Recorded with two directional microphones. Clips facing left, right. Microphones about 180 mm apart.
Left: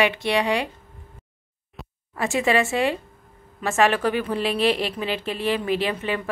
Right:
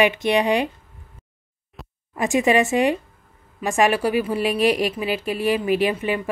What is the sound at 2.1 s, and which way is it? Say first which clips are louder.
A woman's voice: right 3 dB; 15° right (ahead or behind).